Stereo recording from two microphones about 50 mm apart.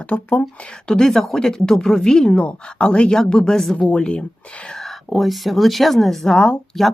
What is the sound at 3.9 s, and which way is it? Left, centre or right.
Speech, left.